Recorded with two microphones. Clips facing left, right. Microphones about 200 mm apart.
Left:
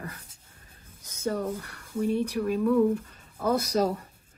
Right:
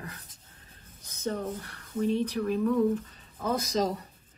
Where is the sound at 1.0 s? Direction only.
10° left (ahead or behind).